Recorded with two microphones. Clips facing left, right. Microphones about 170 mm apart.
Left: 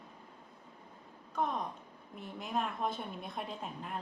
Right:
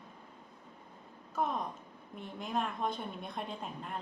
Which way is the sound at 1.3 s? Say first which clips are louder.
Right 1 dB; 5° right (ahead or behind).